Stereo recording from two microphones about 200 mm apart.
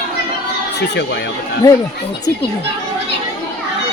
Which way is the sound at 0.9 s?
60° left (ahead or behind).